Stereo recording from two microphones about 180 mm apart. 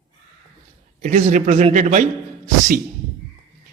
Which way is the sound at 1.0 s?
40° right (ahead or behind).